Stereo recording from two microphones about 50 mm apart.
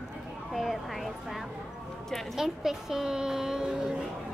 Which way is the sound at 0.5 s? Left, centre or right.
Centre.